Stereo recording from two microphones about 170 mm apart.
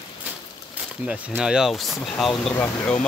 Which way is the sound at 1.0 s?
5° right (ahead or behind).